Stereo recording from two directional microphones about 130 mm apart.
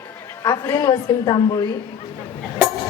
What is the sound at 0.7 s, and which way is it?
Speech, 35° left (ahead or behind).